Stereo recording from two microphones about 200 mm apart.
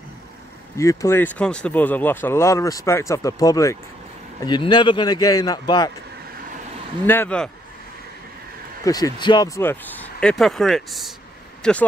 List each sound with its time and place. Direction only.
0.7 s speech: 15° left (ahead or behind)
7.1 s speech: 10° left (ahead or behind)
8.8 s speech: 20° left (ahead or behind)